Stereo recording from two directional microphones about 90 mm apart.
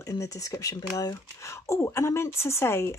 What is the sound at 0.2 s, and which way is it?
Speech, 40° left (ahead or behind).